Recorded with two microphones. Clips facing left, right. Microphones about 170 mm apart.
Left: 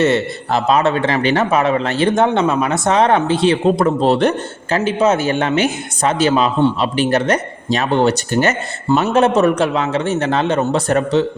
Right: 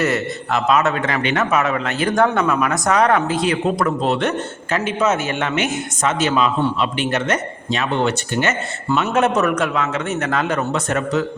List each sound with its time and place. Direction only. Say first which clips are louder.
0.0 s a man's voice: left 5 dB; 30° left (ahead or behind)